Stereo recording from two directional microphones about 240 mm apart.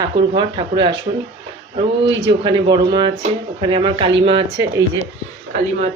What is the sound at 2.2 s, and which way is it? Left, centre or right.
Speech, centre.